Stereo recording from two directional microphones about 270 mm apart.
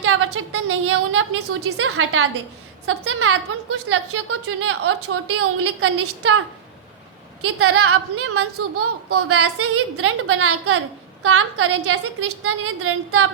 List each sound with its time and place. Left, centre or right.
0.0 s a woman's voice: right
7.4 s a woman's voice: right